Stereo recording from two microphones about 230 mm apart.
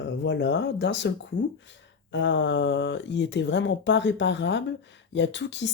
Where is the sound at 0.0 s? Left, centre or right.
Left.